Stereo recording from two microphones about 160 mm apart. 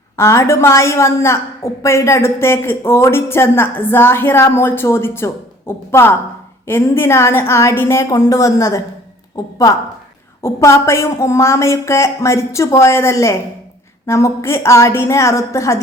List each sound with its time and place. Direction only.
0.2 s a woman's voice: 15° left (ahead or behind)